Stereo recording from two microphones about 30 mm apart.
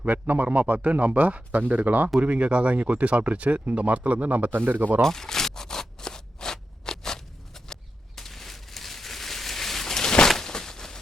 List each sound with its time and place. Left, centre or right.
0.0 s a man's voice: right
2.1 s speech: right
2.7 s a man's voice: right
5.0 s a sound: centre